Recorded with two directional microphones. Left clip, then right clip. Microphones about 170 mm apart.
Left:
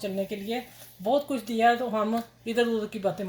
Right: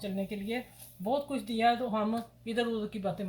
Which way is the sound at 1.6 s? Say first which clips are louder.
Left 5 dB; 45° left (ahead or behind).